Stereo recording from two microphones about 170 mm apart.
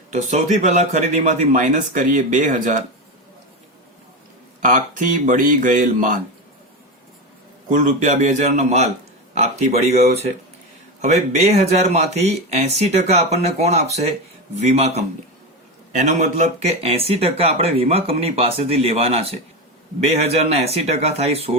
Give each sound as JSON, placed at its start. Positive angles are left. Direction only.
{"t": 0.1, "sound": "speech", "side_deg": -45}
{"t": 4.6, "sound": "speech", "side_deg": -50}
{"t": 7.7, "sound": "speech", "side_deg": -50}